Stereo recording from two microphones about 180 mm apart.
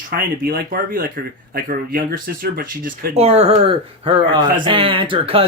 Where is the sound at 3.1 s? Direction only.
35° right (ahead or behind).